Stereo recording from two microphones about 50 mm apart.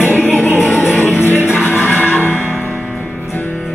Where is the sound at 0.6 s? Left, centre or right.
Centre.